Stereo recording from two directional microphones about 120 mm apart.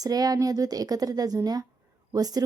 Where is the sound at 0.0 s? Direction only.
30° right (ahead or behind).